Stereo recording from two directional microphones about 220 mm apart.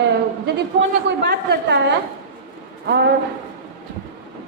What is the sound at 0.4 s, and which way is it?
A woman's voice, 50° right (ahead or behind).